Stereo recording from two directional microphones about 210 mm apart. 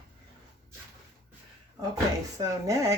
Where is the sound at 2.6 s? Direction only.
15° right (ahead or behind).